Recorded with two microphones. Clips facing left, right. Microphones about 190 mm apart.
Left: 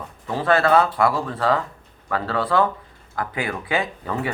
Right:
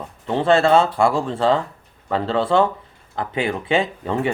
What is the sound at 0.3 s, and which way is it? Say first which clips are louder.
Speech: right 3 dB; 25° right (ahead or behind).